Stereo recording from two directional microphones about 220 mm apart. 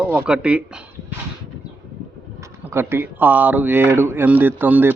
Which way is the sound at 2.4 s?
10° right (ahead or behind).